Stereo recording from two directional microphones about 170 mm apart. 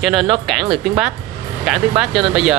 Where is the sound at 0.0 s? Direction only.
Centre (ahead or behind).